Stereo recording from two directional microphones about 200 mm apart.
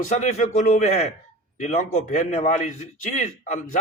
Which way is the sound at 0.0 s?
40° left (ahead or behind).